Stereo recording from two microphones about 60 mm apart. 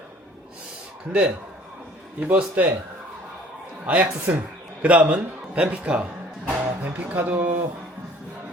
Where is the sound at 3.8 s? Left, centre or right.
Right.